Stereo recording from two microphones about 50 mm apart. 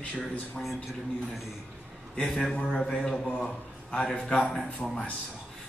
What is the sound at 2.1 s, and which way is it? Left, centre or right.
A man's voice, centre.